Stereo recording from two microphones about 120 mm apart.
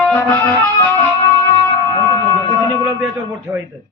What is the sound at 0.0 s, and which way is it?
Music, 15° left (ahead or behind).